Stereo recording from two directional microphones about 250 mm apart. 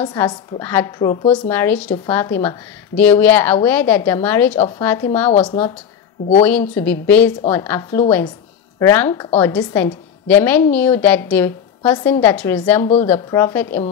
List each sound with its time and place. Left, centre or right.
0.0 s a woman's voice: centre
1.3 s a woman's voice: centre
4.6 s speech: left
4.8 s a woman's voice: centre
6.4 s a woman's voice: centre
12.8 s a woman's voice: left